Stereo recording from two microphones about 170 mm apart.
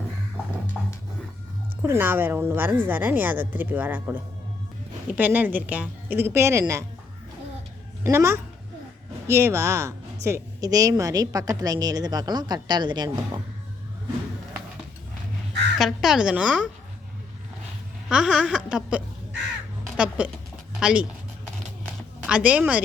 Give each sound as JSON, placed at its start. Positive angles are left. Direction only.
{"t": 1.8, "sound": "a woman's voice", "side_deg": -15}
{"t": 8.0, "sound": "a woman's voice", "side_deg": -15}
{"t": 15.8, "sound": "speech", "side_deg": 0}
{"t": 18.1, "sound": "a woman's voice", "side_deg": -5}
{"t": 22.3, "sound": "a woman's voice", "side_deg": -5}